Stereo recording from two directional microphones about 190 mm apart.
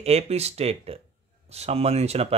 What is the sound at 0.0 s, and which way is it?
Speech, 35° right (ahead or behind).